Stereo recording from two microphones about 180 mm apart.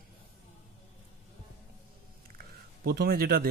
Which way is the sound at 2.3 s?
60° right (ahead or behind).